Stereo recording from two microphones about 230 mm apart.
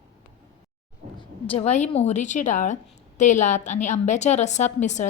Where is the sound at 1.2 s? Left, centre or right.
Left.